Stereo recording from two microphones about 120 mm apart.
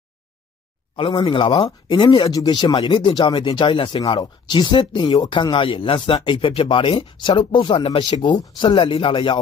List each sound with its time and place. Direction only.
0.9 s speech: 45° left (ahead or behind)